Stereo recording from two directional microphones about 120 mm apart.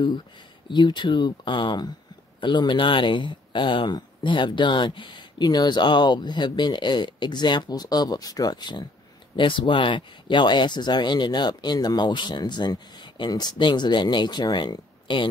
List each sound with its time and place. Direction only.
0.7 s speech: 40° left (ahead or behind)